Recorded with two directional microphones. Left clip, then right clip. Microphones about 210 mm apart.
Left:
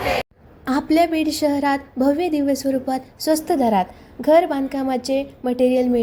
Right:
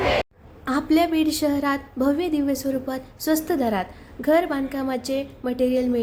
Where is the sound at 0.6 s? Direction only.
15° left (ahead or behind).